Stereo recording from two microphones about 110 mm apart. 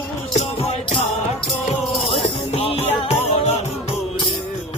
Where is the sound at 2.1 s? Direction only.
60° left (ahead or behind); by 3.5 s 85° left.